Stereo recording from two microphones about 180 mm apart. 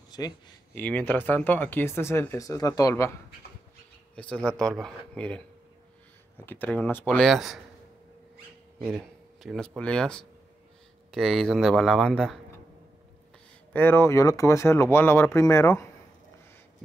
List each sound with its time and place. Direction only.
0.1 s speech: 20° left (ahead or behind)
0.7 s speech: 10° left (ahead or behind)
4.1 s speech: 5° left (ahead or behind)
8.8 s speech: centre (ahead or behind)
13.7 s speech: 10° left (ahead or behind)